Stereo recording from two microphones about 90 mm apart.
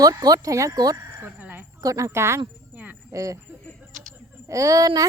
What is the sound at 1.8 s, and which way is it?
Speech, 35° right (ahead or behind).